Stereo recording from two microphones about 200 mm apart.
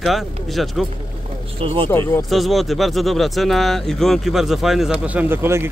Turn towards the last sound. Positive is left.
turn(degrees=-10)  # may be behind; listen again after turning